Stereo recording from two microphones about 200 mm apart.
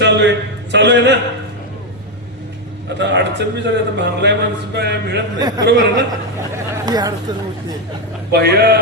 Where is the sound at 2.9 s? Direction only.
60° right (ahead or behind).